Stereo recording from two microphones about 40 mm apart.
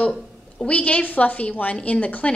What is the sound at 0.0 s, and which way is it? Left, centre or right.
A woman's voice, left.